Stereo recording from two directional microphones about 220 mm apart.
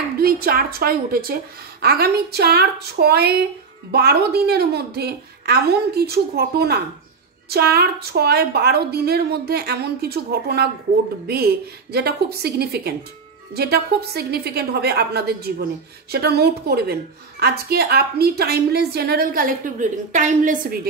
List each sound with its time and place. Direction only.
0.2 s a woman's voice: 45° right (ahead or behind)